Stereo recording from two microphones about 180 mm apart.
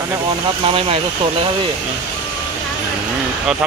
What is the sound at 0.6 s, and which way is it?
Speech, 30° right (ahead or behind).